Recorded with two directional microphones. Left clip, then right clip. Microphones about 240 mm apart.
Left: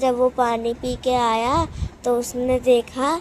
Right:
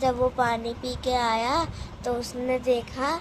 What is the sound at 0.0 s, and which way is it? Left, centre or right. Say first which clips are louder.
A woman's voice: left 5 dB; left.